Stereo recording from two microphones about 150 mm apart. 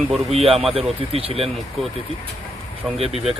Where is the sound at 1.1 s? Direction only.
40° right (ahead or behind).